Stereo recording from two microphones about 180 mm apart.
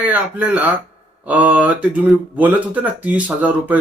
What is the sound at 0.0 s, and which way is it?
Speech, 10° right (ahead or behind).